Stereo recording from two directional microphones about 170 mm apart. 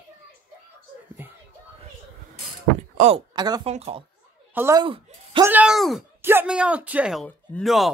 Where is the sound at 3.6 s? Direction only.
35° right (ahead or behind).